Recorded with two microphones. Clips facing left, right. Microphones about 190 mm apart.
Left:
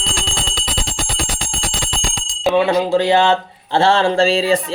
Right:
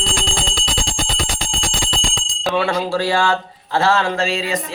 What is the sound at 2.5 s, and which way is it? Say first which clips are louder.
Speech: left 5 dB; 20° left (ahead or behind).